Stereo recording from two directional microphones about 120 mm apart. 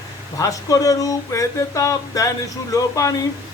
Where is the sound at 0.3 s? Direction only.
25° left (ahead or behind).